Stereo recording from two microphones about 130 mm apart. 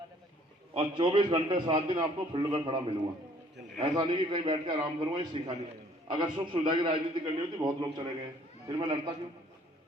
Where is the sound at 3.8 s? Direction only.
35° right (ahead or behind).